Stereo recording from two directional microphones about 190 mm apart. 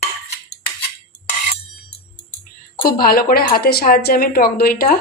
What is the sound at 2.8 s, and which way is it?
A woman's voice, 50° left (ahead or behind).